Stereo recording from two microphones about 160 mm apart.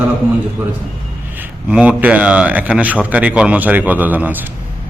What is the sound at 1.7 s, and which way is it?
A man's voice, 10° right (ahead or behind).